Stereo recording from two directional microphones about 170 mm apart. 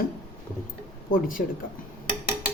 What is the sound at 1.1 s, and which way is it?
Speech, 55° left (ahead or behind).